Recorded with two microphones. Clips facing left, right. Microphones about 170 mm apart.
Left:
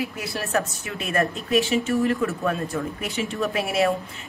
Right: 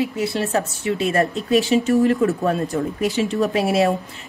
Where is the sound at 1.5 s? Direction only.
40° right (ahead or behind).